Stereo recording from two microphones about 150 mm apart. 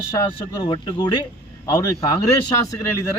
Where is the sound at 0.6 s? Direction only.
35° left (ahead or behind).